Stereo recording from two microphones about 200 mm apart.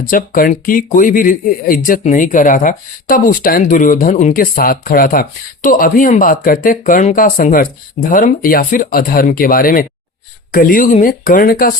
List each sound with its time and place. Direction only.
0.1 s speech: 45° left (ahead or behind)